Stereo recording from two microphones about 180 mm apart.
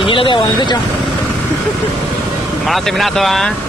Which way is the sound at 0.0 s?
30° left (ahead or behind).